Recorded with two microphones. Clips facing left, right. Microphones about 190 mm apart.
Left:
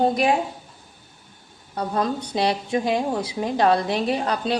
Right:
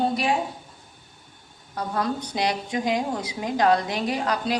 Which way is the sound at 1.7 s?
25° left (ahead or behind).